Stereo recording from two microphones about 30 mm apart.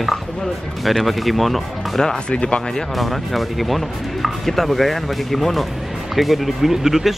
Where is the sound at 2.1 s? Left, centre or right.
Left.